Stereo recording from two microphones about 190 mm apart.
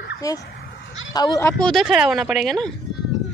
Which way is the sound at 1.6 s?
Centre (ahead or behind).